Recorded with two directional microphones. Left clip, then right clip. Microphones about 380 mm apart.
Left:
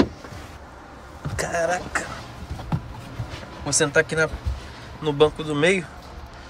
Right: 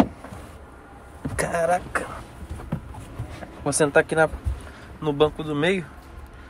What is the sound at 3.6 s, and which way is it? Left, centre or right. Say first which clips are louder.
Speech: right 1 dB; centre.